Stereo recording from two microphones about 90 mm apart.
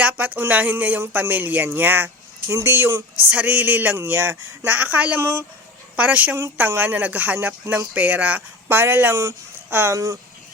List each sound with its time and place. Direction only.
0.0 s speech: 15° right (ahead or behind)
3.2 s speech: 15° right (ahead or behind)